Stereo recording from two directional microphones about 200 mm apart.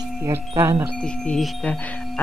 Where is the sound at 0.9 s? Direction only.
5° left (ahead or behind).